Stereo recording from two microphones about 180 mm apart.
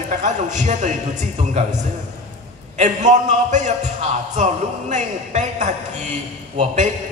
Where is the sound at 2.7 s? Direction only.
40° right (ahead or behind).